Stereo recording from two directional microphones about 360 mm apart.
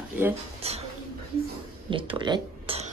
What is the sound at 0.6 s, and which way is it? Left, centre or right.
Speech, centre.